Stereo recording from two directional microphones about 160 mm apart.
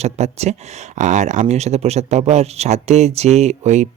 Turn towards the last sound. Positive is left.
turn(degrees=-45)  # may be behind; listen again after turning